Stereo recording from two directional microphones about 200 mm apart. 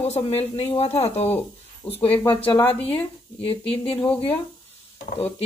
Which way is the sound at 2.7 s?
30° left (ahead or behind).